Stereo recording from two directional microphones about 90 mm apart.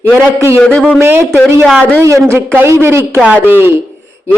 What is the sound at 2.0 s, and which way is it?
Speech, 30° right (ahead or behind).